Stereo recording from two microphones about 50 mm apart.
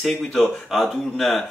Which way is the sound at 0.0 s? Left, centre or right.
Centre.